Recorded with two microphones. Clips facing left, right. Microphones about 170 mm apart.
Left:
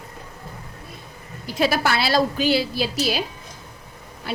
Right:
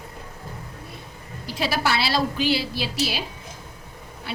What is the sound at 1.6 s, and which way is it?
A woman's voice, 50° left (ahead or behind).